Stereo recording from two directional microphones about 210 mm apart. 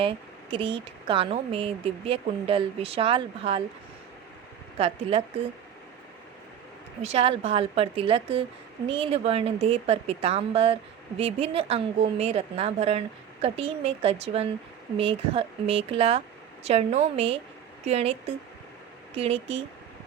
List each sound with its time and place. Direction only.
0.5 s speech: 25° right (ahead or behind)
7.0 s speech: 30° right (ahead or behind)